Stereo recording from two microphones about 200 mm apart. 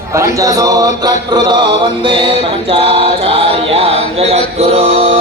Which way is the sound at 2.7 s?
25° right (ahead or behind).